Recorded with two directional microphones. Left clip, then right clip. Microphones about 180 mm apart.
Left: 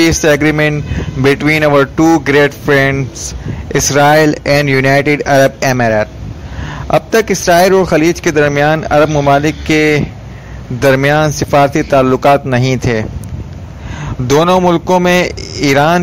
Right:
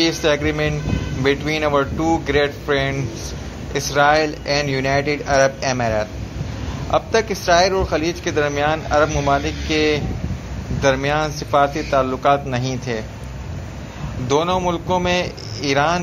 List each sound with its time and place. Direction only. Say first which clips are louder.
0.0 s speech: left 8 dB; 50° left (ahead or behind)
14.2 s speech: left 9 dB; 50° left (ahead or behind)